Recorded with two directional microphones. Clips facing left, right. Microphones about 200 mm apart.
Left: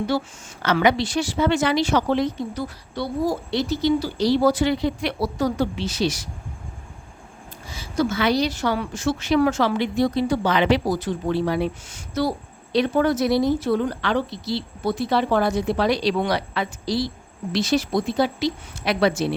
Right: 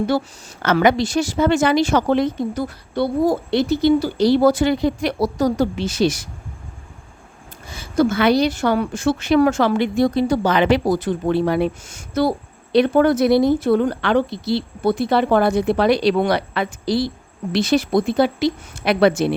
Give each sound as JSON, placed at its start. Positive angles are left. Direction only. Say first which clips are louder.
{"t": 0.6, "sound": "speech", "louder": "right 3 dB", "side_deg": -50}
{"t": 7.7, "sound": "a woman's voice", "louder": "right 5 dB", "side_deg": -55}